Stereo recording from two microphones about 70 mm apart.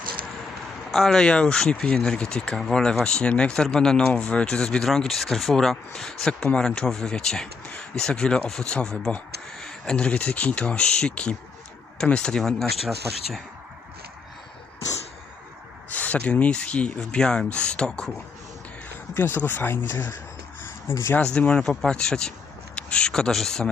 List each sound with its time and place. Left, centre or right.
0.9 s speech: centre
15.9 s a sound: left
16.1 s speech: centre
19.1 s speech: left
20.6 s a sound: left
21.3 s speech: centre